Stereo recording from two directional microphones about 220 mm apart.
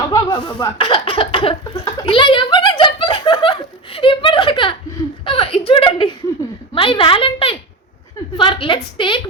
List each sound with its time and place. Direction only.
0.1 s a woman's voice: 20° left (ahead or behind)